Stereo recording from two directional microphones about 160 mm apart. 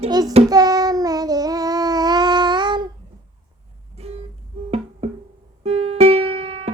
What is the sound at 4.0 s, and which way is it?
Music, 40° right (ahead or behind).